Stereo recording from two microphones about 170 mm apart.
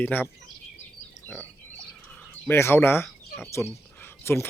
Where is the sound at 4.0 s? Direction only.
15° left (ahead or behind).